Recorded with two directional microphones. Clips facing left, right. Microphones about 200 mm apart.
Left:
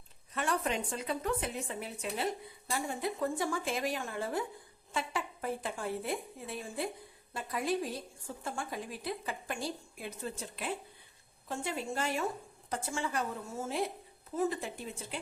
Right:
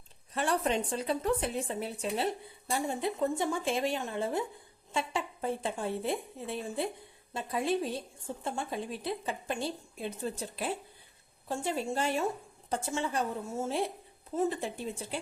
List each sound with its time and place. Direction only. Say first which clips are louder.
0.3 s a woman's voice: right 4 dB; 30° right (ahead or behind)